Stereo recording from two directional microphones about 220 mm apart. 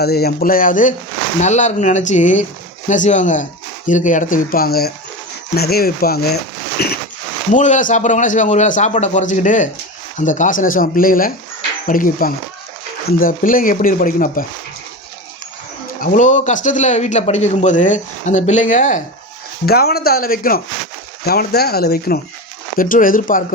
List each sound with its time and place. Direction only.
0.0 s speech: 45° left (ahead or behind)
7.5 s speech: 35° left (ahead or behind)
16.0 s speech: 35° left (ahead or behind)